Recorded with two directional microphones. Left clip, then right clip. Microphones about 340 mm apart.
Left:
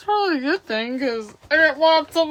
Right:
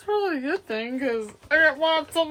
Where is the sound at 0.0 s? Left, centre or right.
Centre.